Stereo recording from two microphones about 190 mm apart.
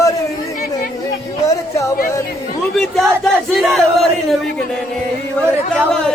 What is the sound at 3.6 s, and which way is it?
Music, centre (ahead or behind).